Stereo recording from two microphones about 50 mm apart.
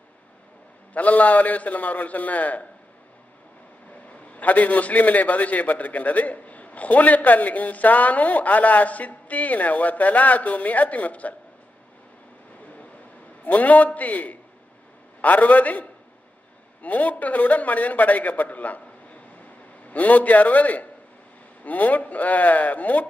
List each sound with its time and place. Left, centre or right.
0.9 s a man's voice: left
4.4 s a man's voice: left
13.4 s a man's voice: left
19.9 s a man's voice: left